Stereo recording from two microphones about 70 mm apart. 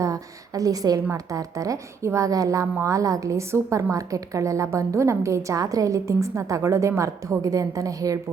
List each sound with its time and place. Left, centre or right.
0.0 s a woman's voice: right